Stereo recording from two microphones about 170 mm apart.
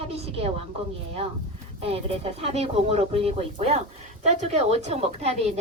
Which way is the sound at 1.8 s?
35° right (ahead or behind).